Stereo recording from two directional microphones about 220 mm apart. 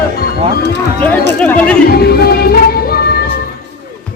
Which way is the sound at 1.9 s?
45° left (ahead or behind).